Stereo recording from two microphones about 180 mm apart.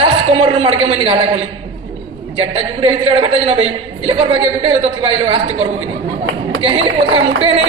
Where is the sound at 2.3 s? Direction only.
30° right (ahead or behind).